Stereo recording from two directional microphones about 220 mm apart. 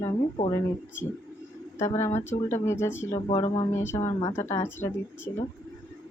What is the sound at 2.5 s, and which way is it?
Speech, 10° left (ahead or behind).